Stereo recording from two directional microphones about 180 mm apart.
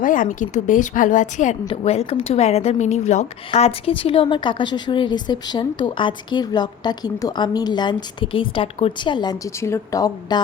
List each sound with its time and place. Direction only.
0.0 s a woman's voice: 45° left (ahead or behind)
1.6 s speech: 35° left (ahead or behind)